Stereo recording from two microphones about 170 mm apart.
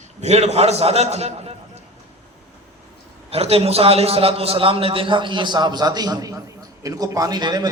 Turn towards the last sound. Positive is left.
turn(degrees=-25)  # may be behind; listen again after turning